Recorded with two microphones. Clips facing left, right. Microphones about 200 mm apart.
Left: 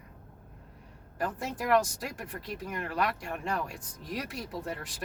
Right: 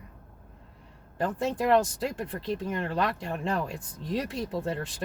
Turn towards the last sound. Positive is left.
turn(degrees=-25)  # may be behind; listen again after turning